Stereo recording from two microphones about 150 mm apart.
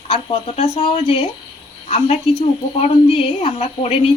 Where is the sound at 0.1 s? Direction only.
40° left (ahead or behind).